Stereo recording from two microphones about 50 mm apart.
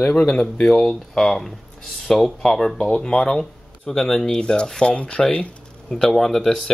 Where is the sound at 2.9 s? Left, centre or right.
Left.